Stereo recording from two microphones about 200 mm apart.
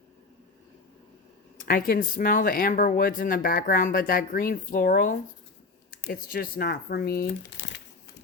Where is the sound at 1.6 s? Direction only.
45° left (ahead or behind).